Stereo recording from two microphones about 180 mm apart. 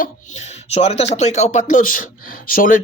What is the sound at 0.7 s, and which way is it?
Speech, 35° left (ahead or behind).